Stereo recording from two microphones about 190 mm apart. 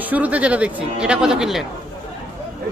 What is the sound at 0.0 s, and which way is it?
Speech, 10° right (ahead or behind).